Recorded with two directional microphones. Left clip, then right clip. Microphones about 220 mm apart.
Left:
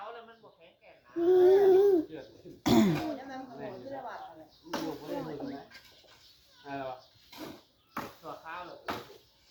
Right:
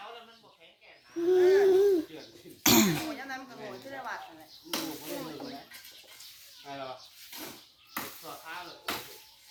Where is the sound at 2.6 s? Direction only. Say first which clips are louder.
Right 2 dB; 5° right (ahead or behind).